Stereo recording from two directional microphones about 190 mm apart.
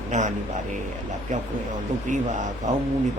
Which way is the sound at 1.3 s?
40° right (ahead or behind).